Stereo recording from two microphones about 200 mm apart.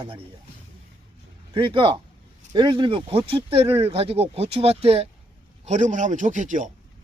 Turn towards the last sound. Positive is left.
turn(degrees=-40)  # may be behind; listen again after turning